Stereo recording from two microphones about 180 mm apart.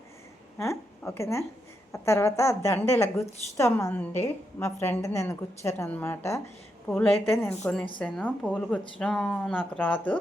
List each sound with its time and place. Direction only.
0.6 s a woman's voice: 15° left (ahead or behind)